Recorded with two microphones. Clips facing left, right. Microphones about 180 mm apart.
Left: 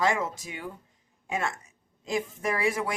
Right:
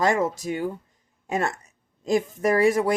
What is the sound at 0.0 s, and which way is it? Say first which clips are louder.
Speech: right 5 dB; 40° right (ahead or behind).